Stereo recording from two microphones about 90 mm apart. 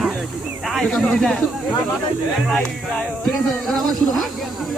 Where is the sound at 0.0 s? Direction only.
Centre (ahead or behind).